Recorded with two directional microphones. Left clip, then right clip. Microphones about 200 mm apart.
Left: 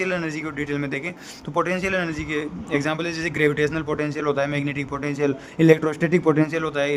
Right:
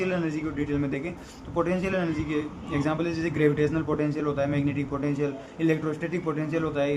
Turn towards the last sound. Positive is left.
turn(degrees=60)  # may be behind; listen again after turning